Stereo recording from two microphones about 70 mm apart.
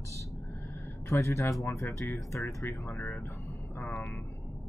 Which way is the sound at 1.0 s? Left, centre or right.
Left.